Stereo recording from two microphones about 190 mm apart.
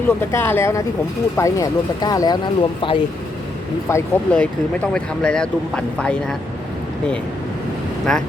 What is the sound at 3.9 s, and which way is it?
Speech, 10° left (ahead or behind).